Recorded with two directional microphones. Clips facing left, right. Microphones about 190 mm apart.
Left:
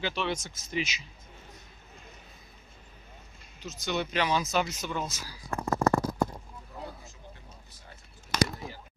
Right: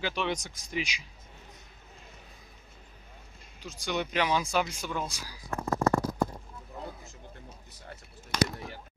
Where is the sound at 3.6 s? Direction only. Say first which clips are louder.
Left 1 dB; 10° right (ahead or behind).